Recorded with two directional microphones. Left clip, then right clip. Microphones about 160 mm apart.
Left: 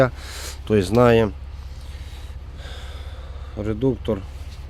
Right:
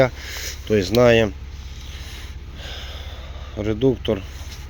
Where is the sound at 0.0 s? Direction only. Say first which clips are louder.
Right 1 dB; 45° left (ahead or behind).